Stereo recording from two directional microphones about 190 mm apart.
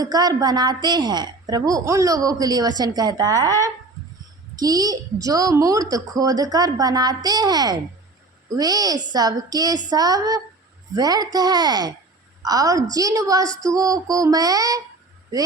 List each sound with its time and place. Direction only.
0.0 s a woman's voice: 20° right (ahead or behind)
4.5 s a woman's voice: 20° right (ahead or behind)